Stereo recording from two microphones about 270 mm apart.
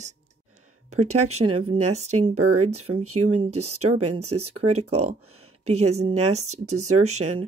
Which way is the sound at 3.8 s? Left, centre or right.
Right.